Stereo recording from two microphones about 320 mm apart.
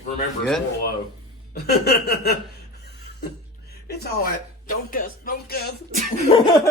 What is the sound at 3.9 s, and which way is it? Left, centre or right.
Speech, left.